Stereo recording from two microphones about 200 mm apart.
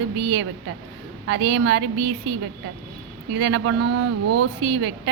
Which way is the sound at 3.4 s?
65° right (ahead or behind).